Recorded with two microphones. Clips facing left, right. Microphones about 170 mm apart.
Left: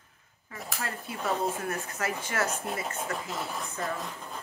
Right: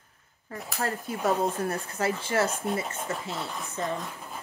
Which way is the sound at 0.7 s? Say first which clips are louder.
Right 6 dB; 40° right (ahead or behind).